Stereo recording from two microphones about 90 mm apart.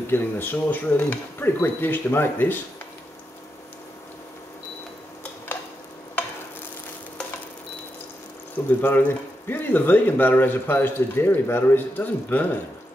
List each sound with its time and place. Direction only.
0.0 s speech: 25° left (ahead or behind)
8.8 s speech: 20° left (ahead or behind)